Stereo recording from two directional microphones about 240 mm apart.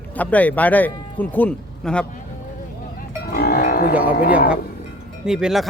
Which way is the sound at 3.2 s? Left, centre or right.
Left.